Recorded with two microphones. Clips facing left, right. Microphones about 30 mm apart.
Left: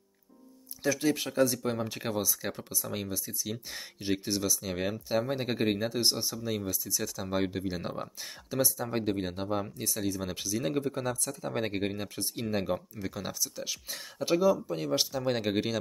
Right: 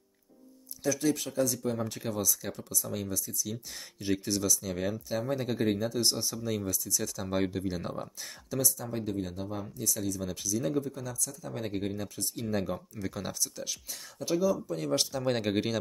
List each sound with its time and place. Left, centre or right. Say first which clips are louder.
0.8 s speech: left 1 dB; left
8.9 s speech: left 3 dB; left; by 13.1 s centre
13.1 s speech: even; centre
13.8 s speech: left 5 dB; left
14.9 s speech: even; centre